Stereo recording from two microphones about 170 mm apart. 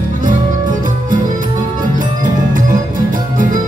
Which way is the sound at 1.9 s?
50° right (ahead or behind).